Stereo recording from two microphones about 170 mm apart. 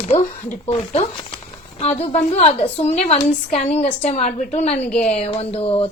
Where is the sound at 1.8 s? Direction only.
40° left (ahead or behind).